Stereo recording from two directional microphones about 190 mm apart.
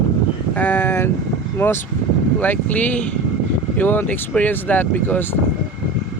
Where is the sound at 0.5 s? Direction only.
10° left (ahead or behind).